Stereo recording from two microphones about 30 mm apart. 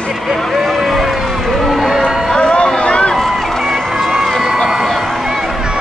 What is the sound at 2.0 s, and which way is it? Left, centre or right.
Music, left.